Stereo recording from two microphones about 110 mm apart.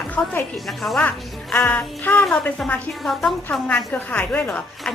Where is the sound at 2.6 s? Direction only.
10° left (ahead or behind).